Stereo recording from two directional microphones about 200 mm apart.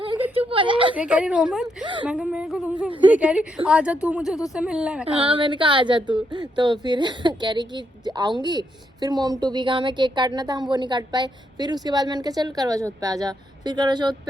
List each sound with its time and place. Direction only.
0.3 s a sound: 25° right (ahead or behind)
0.9 s a woman's voice: 5° right (ahead or behind)
1.6 s a woman's voice: 25° right (ahead or behind)
2.0 s a woman's voice: 5° right (ahead or behind)
5.0 s a woman's voice: 25° right (ahead or behind)